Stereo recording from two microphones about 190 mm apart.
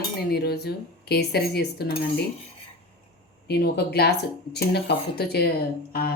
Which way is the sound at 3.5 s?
60° left (ahead or behind).